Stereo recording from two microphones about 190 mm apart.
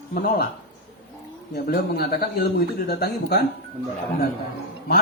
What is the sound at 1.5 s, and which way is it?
Speech, 55° left (ahead or behind).